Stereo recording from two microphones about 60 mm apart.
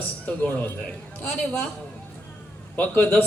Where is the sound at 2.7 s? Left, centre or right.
Left.